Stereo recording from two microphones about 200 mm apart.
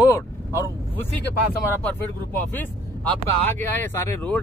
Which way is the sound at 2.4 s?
10° left (ahead or behind).